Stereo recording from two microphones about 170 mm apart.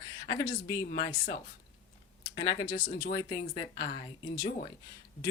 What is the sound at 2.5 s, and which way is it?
Speech, 55° left (ahead or behind).